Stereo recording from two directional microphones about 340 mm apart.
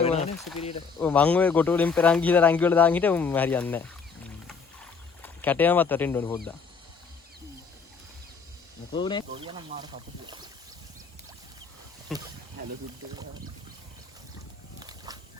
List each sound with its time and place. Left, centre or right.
0.0 s speech: centre
1.0 s speech: centre
8.9 s speech: centre
9.3 s speech: centre
12.1 s speech: centre
14.8 s a sound: centre